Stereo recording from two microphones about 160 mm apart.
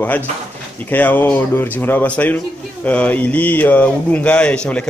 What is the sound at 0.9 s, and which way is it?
Speech, 10° left (ahead or behind).